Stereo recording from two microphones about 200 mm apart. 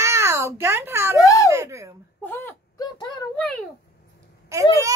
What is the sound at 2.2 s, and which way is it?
Wail, 10° left (ahead or behind).